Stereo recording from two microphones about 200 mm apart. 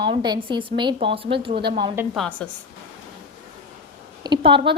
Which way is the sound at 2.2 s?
5° left (ahead or behind).